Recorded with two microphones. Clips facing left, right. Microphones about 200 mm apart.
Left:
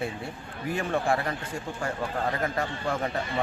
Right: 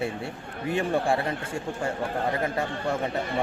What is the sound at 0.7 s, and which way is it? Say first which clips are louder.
Speech: right 2 dB; 25° right (ahead or behind).